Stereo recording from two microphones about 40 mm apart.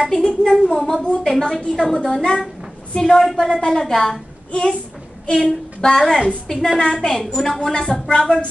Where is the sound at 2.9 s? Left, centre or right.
Centre.